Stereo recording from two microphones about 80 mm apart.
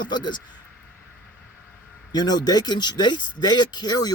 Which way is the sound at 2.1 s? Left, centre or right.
Left.